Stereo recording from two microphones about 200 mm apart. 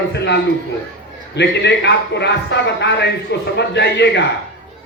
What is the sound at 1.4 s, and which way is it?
A man's voice, 60° left (ahead or behind).